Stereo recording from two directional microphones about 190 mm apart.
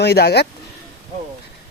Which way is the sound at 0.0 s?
55° left (ahead or behind).